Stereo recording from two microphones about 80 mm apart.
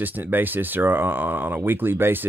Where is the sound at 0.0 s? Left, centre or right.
Right.